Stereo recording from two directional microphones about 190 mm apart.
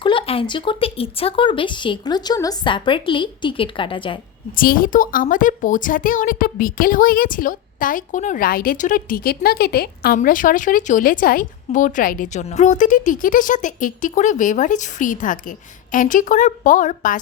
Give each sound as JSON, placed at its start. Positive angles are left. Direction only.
{"t": 0.0, "sound": "speech", "side_deg": 25}
{"t": 4.5, "sound": "a woman's voice", "side_deg": 50}